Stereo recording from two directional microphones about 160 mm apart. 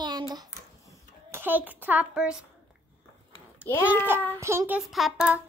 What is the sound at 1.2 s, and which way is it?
A child's voice, 15° right (ahead or behind).